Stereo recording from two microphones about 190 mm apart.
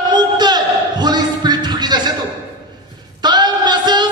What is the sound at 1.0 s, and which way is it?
Music, 20° right (ahead or behind).